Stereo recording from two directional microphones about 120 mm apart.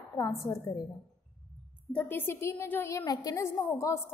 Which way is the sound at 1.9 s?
15° left (ahead or behind).